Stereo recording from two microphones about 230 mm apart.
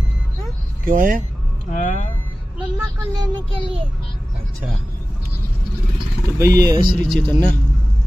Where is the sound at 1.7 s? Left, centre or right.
Left.